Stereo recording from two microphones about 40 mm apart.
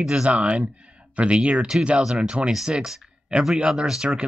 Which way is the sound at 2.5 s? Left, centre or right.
Centre.